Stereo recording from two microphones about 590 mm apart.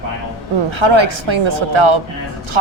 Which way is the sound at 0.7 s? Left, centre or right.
Right.